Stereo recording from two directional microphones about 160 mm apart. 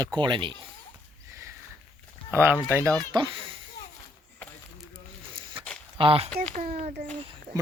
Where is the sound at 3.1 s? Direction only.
30° right (ahead or behind).